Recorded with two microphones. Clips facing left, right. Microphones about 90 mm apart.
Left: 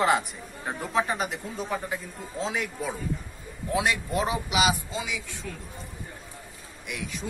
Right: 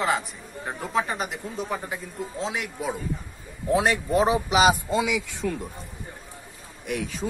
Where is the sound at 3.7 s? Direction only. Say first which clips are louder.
Right 5 dB; 30° right (ahead or behind).